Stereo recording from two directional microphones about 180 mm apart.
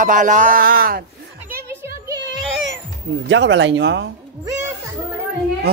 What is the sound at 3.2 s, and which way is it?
Speech, 90° right.